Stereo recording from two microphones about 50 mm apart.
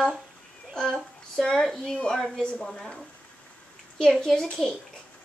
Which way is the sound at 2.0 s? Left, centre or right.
Centre.